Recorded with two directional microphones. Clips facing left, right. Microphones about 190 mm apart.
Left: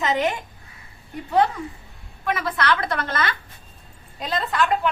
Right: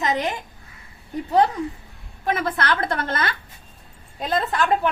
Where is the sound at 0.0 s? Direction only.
40° right (ahead or behind).